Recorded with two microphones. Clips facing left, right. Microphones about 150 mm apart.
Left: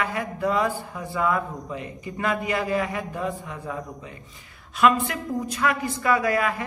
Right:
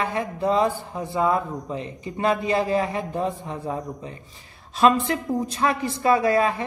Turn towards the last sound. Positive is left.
turn(degrees=-30)  # may be behind; listen again after turning